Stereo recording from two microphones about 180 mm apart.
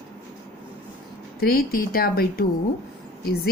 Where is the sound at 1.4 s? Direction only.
55° left (ahead or behind).